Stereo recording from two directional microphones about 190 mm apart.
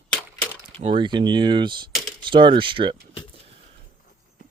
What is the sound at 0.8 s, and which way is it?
Speech, 25° right (ahead or behind).